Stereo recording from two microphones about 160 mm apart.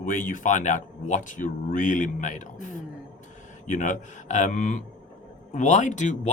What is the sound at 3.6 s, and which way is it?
Speech, 50° left (ahead or behind).